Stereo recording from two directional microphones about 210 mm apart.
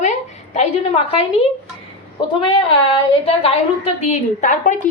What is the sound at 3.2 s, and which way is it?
A woman's voice, 25° left (ahead or behind).